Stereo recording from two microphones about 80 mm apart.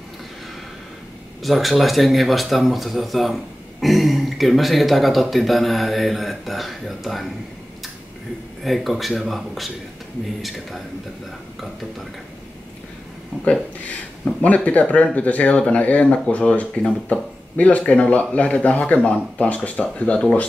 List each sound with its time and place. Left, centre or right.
1.4 s speech: centre
8.6 s speech: centre
14.4 s speech: centre